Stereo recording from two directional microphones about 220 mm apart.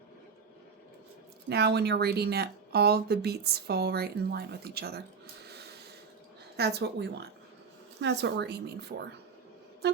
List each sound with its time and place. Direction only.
1.5 s speech: 50° right (ahead or behind)
6.6 s speech: 45° right (ahead or behind)
9.8 s a sound: 50° right (ahead or behind)